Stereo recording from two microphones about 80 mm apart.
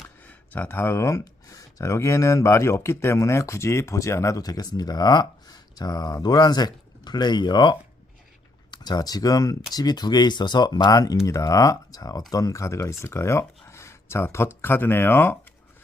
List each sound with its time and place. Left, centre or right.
0.2 s speech: centre; by 9.6 s left
9.7 s speech: left